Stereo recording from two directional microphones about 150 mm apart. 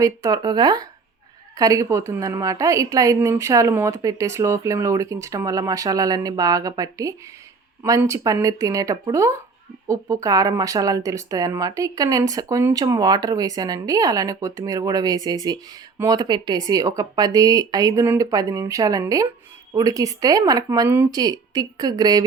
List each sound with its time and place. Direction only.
0.0 s speech: 25° right (ahead or behind)